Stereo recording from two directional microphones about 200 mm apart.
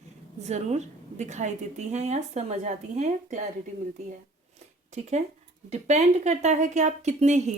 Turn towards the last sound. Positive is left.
turn(degrees=-35)  # may be behind; listen again after turning